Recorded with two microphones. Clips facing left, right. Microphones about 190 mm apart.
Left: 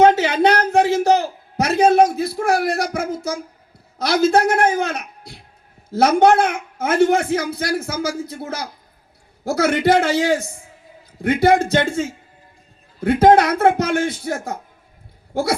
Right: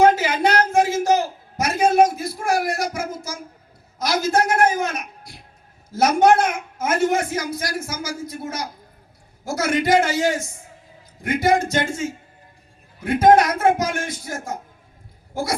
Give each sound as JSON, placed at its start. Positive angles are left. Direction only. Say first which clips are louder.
{"t": 0.0, "sound": "a sound", "louder": "left 3 dB", "side_deg": 65}
{"t": 5.9, "sound": "a man's voice", "louder": "left 2 dB", "side_deg": 60}
{"t": 11.3, "sound": "a man's voice", "louder": "left 4 dB", "side_deg": 60}
{"t": 13.1, "sound": "a man's voice", "louder": "left 2 dB", "side_deg": 60}